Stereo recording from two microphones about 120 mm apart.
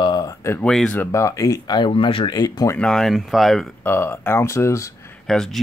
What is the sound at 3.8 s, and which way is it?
Speech, 20° left (ahead or behind).